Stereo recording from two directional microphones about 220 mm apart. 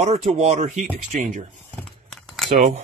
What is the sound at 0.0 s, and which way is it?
Speech, 30° right (ahead or behind).